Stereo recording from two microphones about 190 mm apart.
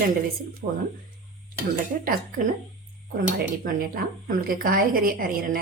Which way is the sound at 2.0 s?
45° right (ahead or behind).